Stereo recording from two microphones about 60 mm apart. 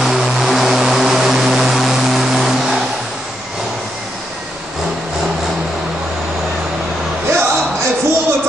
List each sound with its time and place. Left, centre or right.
0.0 s vehicle: centre
7.2 s music: right